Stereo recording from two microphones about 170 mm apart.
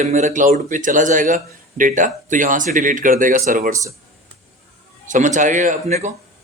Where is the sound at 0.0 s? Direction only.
45° right (ahead or behind).